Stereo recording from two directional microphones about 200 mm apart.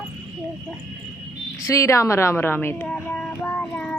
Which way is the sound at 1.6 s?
15° left (ahead or behind).